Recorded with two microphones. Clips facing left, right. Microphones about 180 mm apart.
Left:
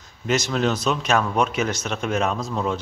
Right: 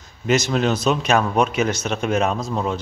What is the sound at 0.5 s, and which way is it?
Speech, 20° right (ahead or behind).